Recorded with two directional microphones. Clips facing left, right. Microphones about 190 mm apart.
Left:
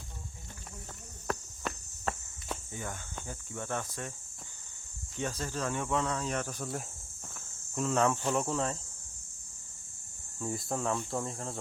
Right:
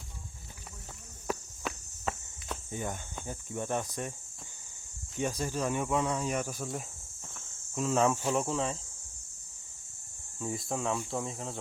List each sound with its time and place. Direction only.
1.3 s insect: centre (ahead or behind)
2.7 s speech: 20° right (ahead or behind)
5.1 s speech: 10° right (ahead or behind)
10.4 s speech: centre (ahead or behind)